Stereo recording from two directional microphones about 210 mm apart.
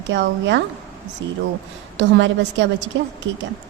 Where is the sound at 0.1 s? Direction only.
60° right (ahead or behind).